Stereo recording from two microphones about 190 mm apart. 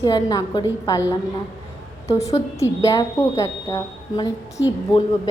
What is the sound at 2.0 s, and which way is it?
A woman's voice, 15° left (ahead or behind).